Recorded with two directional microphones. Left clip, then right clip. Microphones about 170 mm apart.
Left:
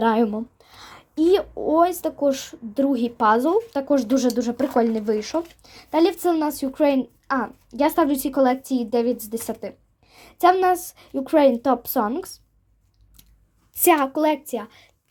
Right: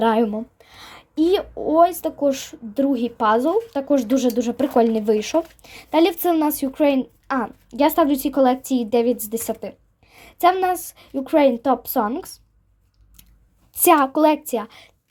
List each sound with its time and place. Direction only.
0.0 s a child's voice: centre (ahead or behind)
13.7 s a woman's voice: 15° right (ahead or behind)